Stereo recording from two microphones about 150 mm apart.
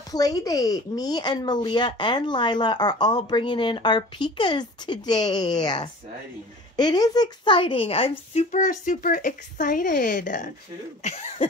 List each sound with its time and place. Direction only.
0.1 s speech: 25° left (ahead or behind)
8.5 s speech: 55° left (ahead or behind)
11.1 s cough: 45° left (ahead or behind)